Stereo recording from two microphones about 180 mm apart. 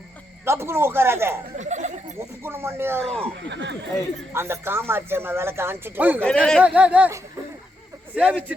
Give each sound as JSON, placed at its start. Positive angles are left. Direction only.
{"t": 0.4, "sound": "a man's voice", "side_deg": -15}
{"t": 1.5, "sound": "a sound", "side_deg": -40}
{"t": 2.1, "sound": "a man's voice", "side_deg": -15}
{"t": 3.0, "sound": "speech", "side_deg": 5}
{"t": 3.5, "sound": "speech", "side_deg": -75}
{"t": 4.4, "sound": "a man's voice", "side_deg": -15}
{"t": 6.2, "sound": "speech", "side_deg": 5}
{"t": 6.6, "sound": "a man's voice", "side_deg": -5}